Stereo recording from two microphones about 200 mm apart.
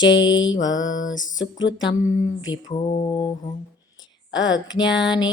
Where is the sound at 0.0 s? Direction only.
70° left (ahead or behind).